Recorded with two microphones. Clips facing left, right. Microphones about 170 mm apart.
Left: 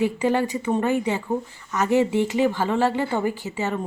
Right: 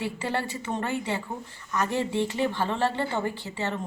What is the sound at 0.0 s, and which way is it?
Speech, 15° left (ahead or behind).